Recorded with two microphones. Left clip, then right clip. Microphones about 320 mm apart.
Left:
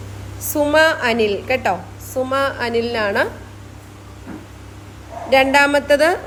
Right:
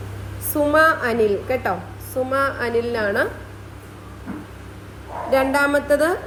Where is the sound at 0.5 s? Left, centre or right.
Centre.